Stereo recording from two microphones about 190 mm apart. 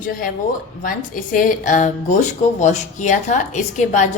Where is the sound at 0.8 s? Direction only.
45° left (ahead or behind).